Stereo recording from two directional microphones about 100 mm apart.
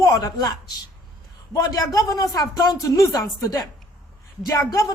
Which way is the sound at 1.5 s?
35° left (ahead or behind).